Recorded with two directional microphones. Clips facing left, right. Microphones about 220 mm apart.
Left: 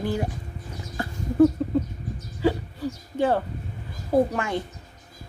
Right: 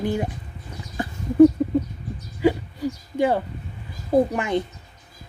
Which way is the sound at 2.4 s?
15° right (ahead or behind).